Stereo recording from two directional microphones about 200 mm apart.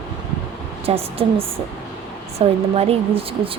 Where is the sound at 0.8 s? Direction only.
30° right (ahead or behind).